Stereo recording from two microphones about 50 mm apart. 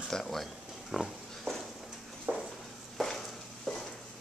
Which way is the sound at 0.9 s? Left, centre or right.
Centre.